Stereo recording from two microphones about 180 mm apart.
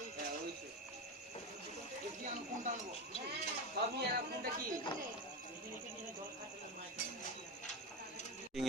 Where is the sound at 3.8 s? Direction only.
70° right (ahead or behind).